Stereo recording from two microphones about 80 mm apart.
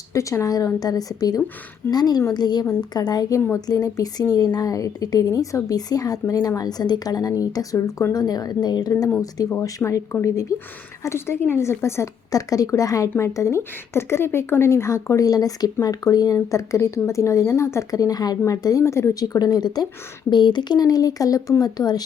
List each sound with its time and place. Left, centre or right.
0.1 s a woman's voice: left
9.6 s a woman's voice: left
12.3 s a woman's voice: left
20.3 s speech: left